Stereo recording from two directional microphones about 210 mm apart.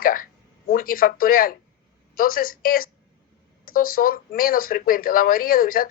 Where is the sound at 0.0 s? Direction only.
40° left (ahead or behind).